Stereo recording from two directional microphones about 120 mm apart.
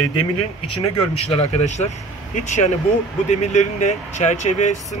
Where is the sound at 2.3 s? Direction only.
80° left.